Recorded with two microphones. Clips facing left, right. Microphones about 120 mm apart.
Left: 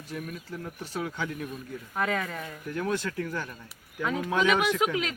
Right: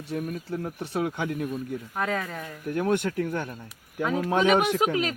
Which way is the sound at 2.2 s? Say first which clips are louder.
Even; 5° right (ahead or behind).